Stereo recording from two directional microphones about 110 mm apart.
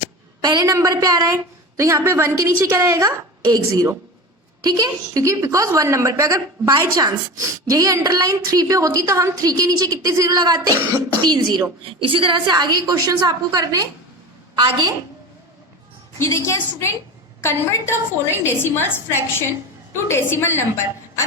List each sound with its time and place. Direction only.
0.4 s a woman's voice: 35° right (ahead or behind)
11.9 s a woman's voice: 55° right (ahead or behind)
16.1 s a woman's voice: 25° left (ahead or behind)